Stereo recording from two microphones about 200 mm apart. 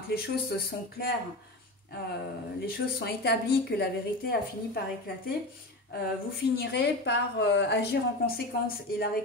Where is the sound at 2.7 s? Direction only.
50° left (ahead or behind).